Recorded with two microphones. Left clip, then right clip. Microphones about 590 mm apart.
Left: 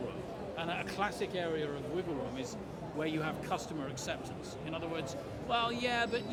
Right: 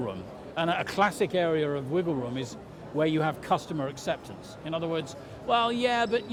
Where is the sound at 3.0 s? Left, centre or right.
Right.